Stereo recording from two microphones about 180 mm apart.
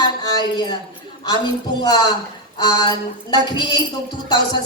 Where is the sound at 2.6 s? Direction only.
25° left (ahead or behind).